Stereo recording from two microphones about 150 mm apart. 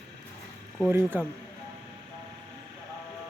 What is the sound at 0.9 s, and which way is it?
Speech, 15° right (ahead or behind).